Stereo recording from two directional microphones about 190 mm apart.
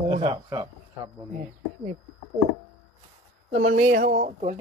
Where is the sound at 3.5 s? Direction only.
40° right (ahead or behind).